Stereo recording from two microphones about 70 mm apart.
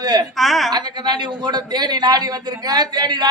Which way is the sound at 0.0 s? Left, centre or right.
Right.